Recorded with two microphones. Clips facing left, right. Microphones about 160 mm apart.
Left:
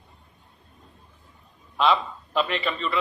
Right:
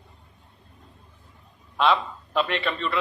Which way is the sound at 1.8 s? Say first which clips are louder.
Even; centre (ahead or behind).